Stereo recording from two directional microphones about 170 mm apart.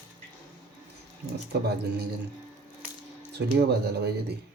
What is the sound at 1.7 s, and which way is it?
Speech, 70° right (ahead or behind).